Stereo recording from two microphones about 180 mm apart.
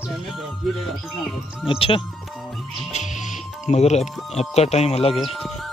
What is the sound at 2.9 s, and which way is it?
Music, 40° left (ahead or behind).